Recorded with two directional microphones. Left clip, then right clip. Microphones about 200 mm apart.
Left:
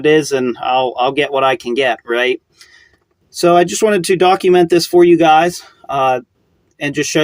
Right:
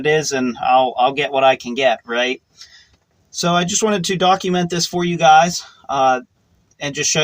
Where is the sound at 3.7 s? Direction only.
30° left (ahead or behind).